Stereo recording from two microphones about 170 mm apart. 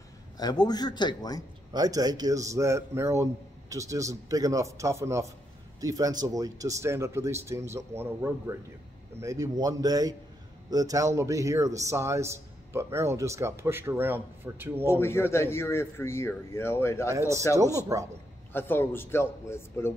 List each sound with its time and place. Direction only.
0.4 s speech: 25° left (ahead or behind)
1.7 s a man's voice: 20° right (ahead or behind)
14.9 s speech: 15° left (ahead or behind)
17.1 s a man's voice: 15° right (ahead or behind)
18.5 s speech: 15° left (ahead or behind)